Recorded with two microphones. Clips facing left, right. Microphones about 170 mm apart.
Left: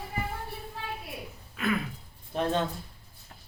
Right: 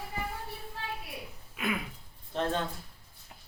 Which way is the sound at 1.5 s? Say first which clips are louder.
Left 4 dB; 15° right (ahead or behind).